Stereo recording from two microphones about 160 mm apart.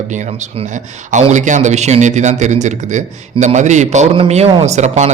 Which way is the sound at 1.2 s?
50° right (ahead or behind).